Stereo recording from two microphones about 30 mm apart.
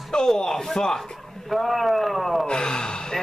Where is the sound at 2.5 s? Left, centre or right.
Left.